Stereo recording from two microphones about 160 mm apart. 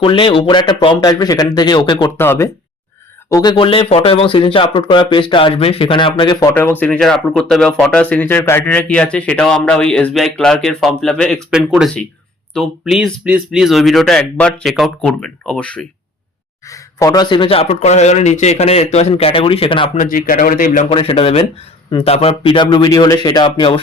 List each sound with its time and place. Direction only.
0.0 s speech: 30° left (ahead or behind)
2.1 s speech: 15° left (ahead or behind)
3.3 s speech: 25° left (ahead or behind)
6.5 s speech: 10° left (ahead or behind)
16.6 s speech: 20° left (ahead or behind)
20.0 s speech: 60° left (ahead or behind)
20.9 s speech: 40° left (ahead or behind)